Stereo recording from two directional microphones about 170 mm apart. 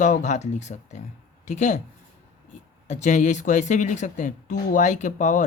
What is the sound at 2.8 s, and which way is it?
Speech, 45° left (ahead or behind).